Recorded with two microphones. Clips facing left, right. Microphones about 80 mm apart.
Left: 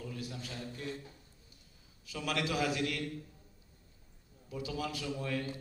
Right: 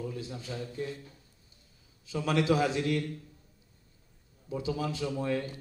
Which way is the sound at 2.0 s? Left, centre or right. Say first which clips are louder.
Right 8 dB; right.